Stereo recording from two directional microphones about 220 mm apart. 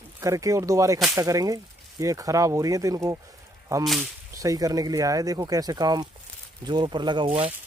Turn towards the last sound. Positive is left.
turn(degrees=-25)  # may be behind; listen again after turning